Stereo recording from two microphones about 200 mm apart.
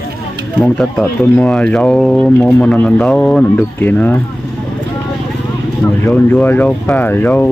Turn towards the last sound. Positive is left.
turn(degrees=10)  # may be behind; listen again after turning